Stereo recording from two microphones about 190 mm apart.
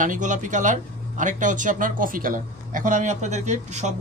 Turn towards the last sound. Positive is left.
turn(degrees=-40)  # may be behind; listen again after turning